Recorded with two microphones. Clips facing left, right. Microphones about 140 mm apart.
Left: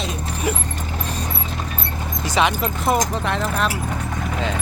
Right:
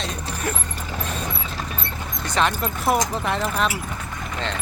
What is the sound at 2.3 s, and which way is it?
Speech, centre (ahead or behind).